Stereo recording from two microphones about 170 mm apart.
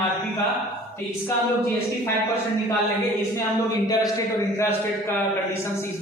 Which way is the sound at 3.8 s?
20° left (ahead or behind).